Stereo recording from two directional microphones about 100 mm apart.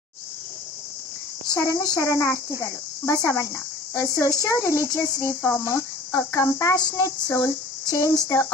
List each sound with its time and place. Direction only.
1.5 s speech: 35° left (ahead or behind)
2.6 s cricket: 30° left (ahead or behind)
4.4 s speech: 30° left (ahead or behind)
6.8 s speech: 45° left (ahead or behind)
7.1 s speech: 30° left (ahead or behind)